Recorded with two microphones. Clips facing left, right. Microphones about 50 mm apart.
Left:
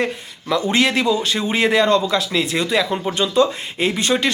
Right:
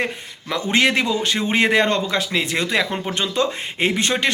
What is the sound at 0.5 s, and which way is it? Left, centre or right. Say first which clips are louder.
Speech: left 1 dB; right.